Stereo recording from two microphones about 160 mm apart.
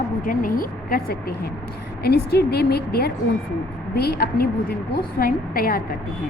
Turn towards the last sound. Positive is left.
turn(degrees=65)  # may be behind; listen again after turning